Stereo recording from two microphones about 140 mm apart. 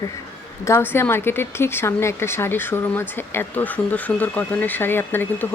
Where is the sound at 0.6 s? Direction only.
20° left (ahead or behind).